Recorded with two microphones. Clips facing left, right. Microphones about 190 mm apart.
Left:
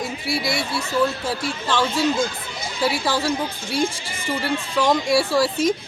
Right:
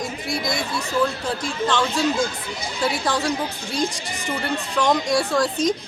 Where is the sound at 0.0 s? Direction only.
5° left (ahead or behind).